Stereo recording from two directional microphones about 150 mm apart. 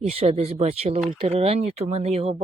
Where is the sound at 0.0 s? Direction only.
45° right (ahead or behind).